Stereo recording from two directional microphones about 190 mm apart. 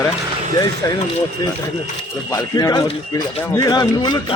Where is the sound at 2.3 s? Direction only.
20° left (ahead or behind).